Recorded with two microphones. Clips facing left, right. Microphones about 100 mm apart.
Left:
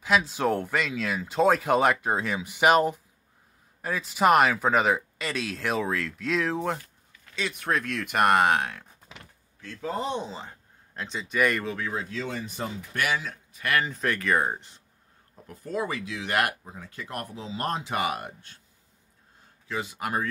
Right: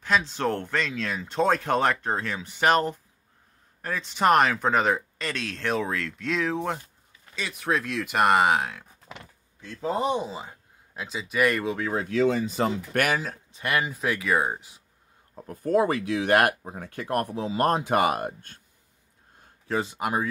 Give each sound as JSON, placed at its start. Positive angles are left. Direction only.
{"t": 0.0, "sound": "speech", "side_deg": 5}
{"t": 9.6, "sound": "speech", "side_deg": -20}
{"t": 12.1, "sound": "speech", "side_deg": -80}
{"t": 12.9, "sound": "speech", "side_deg": -50}
{"t": 13.2, "sound": "speech", "side_deg": -30}
{"t": 13.9, "sound": "speech", "side_deg": -5}
{"t": 15.3, "sound": "speech", "side_deg": -50}
{"t": 19.7, "sound": "speech", "side_deg": -35}
{"t": 20.0, "sound": "speech", "side_deg": -15}